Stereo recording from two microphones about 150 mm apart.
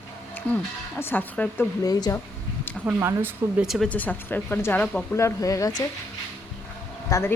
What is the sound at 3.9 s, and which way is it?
Speech, 10° left (ahead or behind).